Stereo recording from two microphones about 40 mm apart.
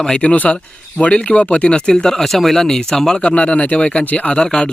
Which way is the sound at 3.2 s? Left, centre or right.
Left.